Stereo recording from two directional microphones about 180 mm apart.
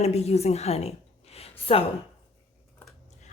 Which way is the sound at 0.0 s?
35° left (ahead or behind).